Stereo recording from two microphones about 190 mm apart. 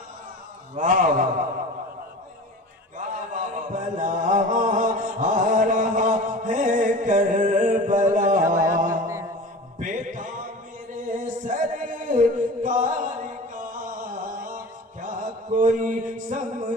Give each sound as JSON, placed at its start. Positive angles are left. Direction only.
{"t": 0.8, "sound": "a man's voice", "side_deg": -45}
{"t": 3.0, "sound": "chant", "side_deg": -45}
{"t": 8.7, "sound": "music", "side_deg": -45}
{"t": 9.0, "sound": "music", "side_deg": -15}
{"t": 9.7, "sound": "music", "side_deg": -45}
{"t": 10.9, "sound": "singing", "side_deg": -45}
{"t": 15.0, "sound": "chant", "side_deg": -45}